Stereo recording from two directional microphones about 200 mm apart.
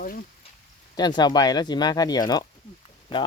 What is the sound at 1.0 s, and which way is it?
Speech, 20° left (ahead or behind).